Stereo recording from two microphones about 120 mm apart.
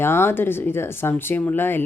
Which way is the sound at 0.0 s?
20° left (ahead or behind).